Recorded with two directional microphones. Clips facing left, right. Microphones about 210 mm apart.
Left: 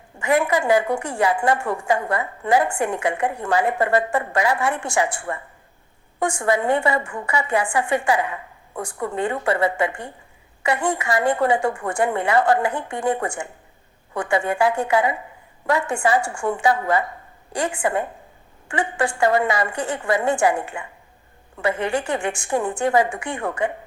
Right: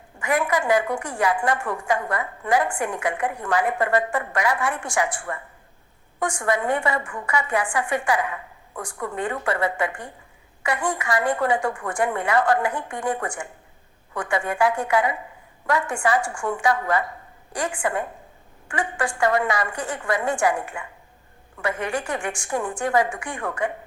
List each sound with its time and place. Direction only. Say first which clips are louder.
0.2 s a woman's voice: left 3 dB; 25° left (ahead or behind)